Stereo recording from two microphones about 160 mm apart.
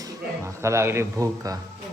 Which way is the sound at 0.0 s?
20° right (ahead or behind).